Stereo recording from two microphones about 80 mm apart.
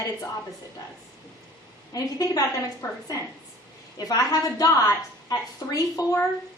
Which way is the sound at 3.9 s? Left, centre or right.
Left.